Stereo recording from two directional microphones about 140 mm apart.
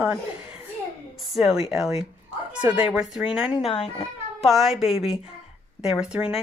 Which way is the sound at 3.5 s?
45° left (ahead or behind).